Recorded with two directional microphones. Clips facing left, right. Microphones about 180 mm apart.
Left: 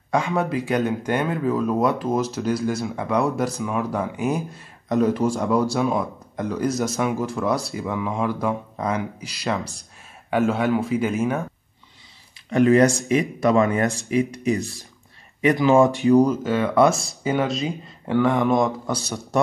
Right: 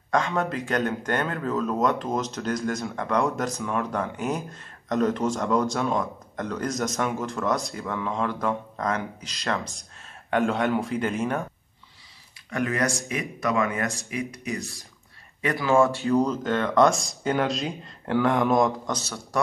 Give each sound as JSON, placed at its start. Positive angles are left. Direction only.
{"t": 0.1, "sound": "speech", "side_deg": 10}
{"t": 12.4, "sound": "speech", "side_deg": 25}
{"t": 18.9, "sound": "speech", "side_deg": 15}